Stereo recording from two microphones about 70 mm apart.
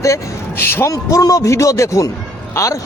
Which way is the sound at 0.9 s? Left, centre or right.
Left.